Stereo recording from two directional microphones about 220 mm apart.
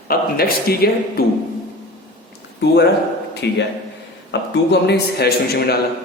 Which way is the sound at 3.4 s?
50° left (ahead or behind).